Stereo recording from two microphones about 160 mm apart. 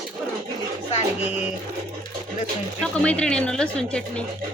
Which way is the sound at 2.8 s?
5° left (ahead or behind).